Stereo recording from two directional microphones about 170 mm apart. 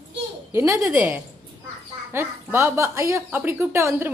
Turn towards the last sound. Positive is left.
turn(degrees=-15)  # may be behind; listen again after turning